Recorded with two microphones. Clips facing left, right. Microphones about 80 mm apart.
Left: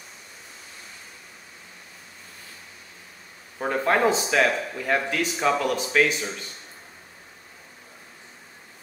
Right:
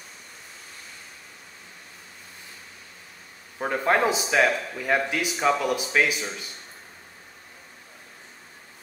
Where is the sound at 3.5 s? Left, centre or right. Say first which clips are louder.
Even; centre.